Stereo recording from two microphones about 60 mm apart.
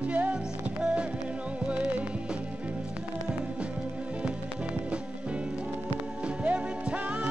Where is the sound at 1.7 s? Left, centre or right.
Right.